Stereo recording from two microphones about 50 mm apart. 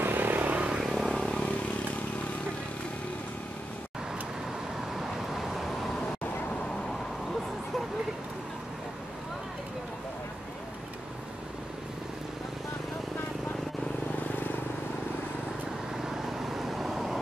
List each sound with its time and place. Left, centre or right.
0.0 s vehicle: right
0.5 s vehicle: right
0.7 s vehicle: centre
1.1 s vehicle: centre
4.9 s vehicle: centre
16.0 s vehicle: centre